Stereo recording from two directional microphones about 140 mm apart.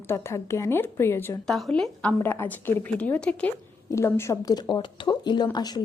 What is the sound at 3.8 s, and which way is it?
Speech, 20° left (ahead or behind).